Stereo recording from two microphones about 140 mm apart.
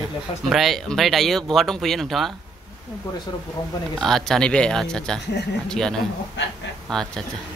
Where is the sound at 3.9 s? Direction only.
5° left (ahead or behind).